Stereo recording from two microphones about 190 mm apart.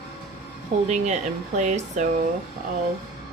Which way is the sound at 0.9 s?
40° right (ahead or behind).